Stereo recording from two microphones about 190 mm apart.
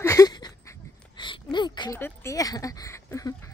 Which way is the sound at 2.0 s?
15° left (ahead or behind).